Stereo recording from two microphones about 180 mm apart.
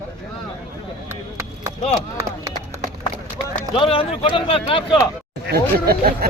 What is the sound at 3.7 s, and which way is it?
Speech, 30° left (ahead or behind).